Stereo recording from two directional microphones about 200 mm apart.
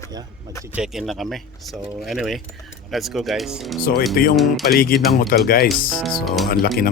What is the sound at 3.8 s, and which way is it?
Speech, 50° left (ahead or behind).